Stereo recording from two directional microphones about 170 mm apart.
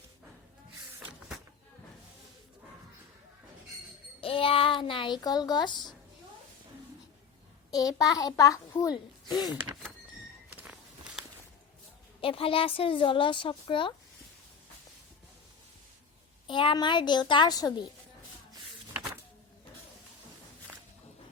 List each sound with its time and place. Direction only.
4.2 s speech: 30° left (ahead or behind)
7.7 s a child's voice: 20° left (ahead or behind)
10.5 s walk: 10° right (ahead or behind)
12.2 s a woman's voice: 30° left (ahead or behind)
16.5 s a child's voice: 30° left (ahead or behind)